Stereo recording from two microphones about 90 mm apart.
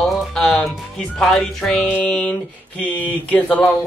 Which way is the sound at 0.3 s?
5° left (ahead or behind).